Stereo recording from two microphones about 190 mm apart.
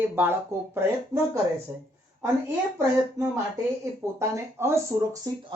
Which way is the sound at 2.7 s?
15° right (ahead or behind).